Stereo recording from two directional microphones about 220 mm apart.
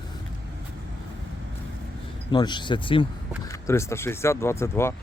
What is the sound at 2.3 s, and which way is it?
Speech, 20° left (ahead or behind).